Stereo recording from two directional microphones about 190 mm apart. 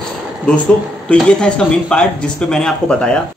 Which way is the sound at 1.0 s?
5° left (ahead or behind).